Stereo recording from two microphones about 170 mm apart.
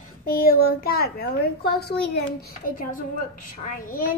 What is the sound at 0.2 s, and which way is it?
A child's voice, 60° left (ahead or behind).